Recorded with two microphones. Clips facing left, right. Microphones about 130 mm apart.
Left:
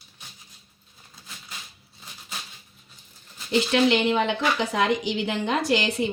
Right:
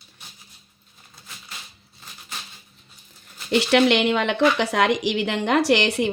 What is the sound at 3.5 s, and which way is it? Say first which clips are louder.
Speech: right 3 dB; 70° right (ahead or behind).